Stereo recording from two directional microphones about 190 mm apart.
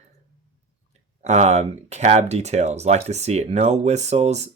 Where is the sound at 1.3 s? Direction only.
35° right (ahead or behind).